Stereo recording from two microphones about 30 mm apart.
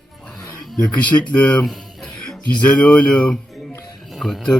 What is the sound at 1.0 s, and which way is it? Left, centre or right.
Speech, left.